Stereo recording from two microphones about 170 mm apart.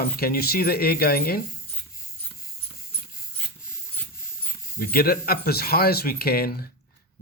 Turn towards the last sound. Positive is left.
turn(degrees=60)  # may be behind; listen again after turning